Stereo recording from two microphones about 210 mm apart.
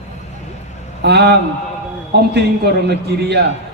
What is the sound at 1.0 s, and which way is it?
Speech, 50° right (ahead or behind).